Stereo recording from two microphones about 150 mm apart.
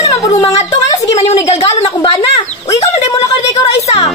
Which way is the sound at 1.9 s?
30° left (ahead or behind).